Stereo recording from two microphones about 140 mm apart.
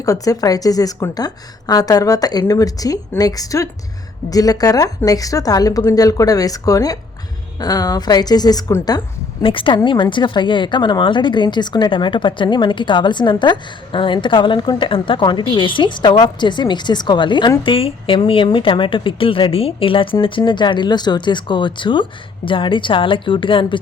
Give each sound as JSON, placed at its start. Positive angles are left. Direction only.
{"t": 0.0, "sound": "a woman's voice", "side_deg": 25}
{"t": 9.4, "sound": "speech", "side_deg": 40}